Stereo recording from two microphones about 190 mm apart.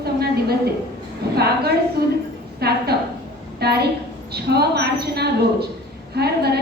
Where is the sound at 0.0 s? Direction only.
55° right (ahead or behind).